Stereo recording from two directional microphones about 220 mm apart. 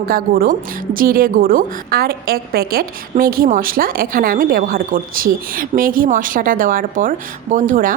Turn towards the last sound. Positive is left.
turn(degrees=-40)  # may be behind; listen again after turning